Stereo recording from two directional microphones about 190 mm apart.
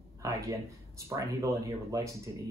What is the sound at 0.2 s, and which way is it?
Speech, 15° right (ahead or behind).